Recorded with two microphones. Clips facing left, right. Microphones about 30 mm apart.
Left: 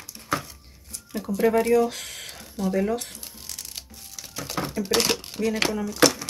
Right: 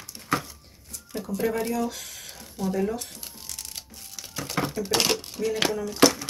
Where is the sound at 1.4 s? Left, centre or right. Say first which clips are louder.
Left 8 dB; left.